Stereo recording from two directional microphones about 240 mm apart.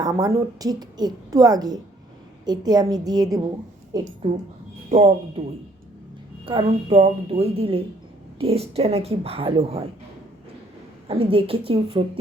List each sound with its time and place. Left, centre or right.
0.0 s a woman's voice: centre
4.9 s speech: right
6.4 s speech: right
11.1 s speech: right